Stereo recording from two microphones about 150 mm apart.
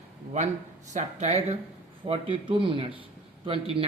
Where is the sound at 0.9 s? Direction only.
50° right (ahead or behind).